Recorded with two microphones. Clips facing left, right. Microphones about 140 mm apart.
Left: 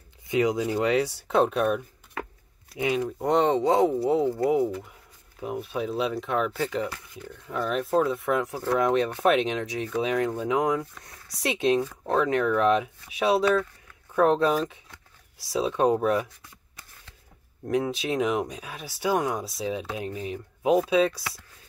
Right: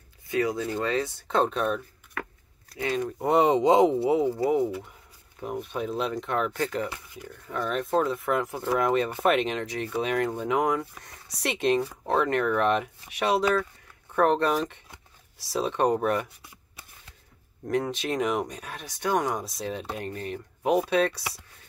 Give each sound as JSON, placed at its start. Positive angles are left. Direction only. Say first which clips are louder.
{"t": 0.3, "sound": "speech", "louder": "left 3 dB", "side_deg": 20}
{"t": 2.2, "sound": "a sound", "louder": "left 1 dB", "side_deg": 25}
{"t": 2.8, "sound": "speech", "louder": "left 2 dB", "side_deg": 10}
{"t": 3.2, "sound": "speech", "louder": "right 2 dB", "side_deg": -5}
{"t": 4.0, "sound": "speech", "louder": "even", "side_deg": -5}
{"t": 6.9, "sound": "speech", "louder": "left 1 dB", "side_deg": -10}
{"t": 7.4, "sound": "speech", "louder": "left 1 dB", "side_deg": 5}
{"t": 17.6, "sound": "speech", "louder": "left 1 dB", "side_deg": 0}